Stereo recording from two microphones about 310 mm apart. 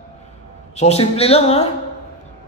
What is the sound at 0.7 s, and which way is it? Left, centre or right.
Speech, centre.